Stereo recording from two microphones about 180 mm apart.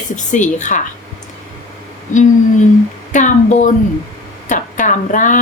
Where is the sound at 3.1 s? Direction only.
45° left (ahead or behind).